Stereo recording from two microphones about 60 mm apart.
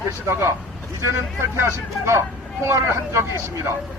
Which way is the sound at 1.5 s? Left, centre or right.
Right.